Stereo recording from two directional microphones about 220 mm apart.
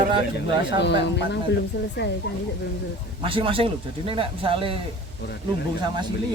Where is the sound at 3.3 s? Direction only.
25° right (ahead or behind).